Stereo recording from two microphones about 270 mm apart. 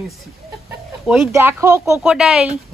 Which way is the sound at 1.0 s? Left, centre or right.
Centre.